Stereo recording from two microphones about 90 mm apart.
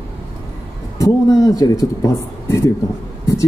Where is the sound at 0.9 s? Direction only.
40° left (ahead or behind).